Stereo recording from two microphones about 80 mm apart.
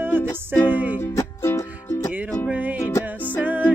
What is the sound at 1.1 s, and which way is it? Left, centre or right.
Music, left.